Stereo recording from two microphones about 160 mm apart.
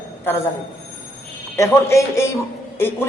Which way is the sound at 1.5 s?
20° left (ahead or behind).